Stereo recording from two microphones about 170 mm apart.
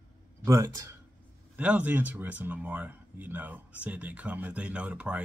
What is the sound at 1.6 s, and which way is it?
Speech, 10° right (ahead or behind).